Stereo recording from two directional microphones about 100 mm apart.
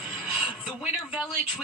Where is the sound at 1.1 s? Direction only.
10° right (ahead or behind).